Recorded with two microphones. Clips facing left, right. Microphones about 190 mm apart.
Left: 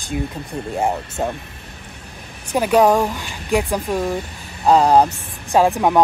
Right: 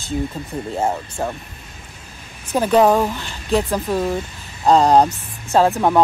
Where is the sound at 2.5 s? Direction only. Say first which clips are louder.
Even; 10° left (ahead or behind).